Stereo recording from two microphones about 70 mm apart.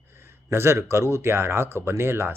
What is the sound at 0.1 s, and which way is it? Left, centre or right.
Speech, right.